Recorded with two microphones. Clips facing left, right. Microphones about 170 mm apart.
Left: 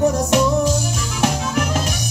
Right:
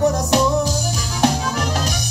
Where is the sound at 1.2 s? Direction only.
35° right (ahead or behind).